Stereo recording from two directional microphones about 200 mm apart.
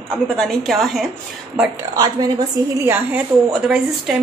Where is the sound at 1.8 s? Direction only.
20° right (ahead or behind); by 4.2 s centre (ahead or behind).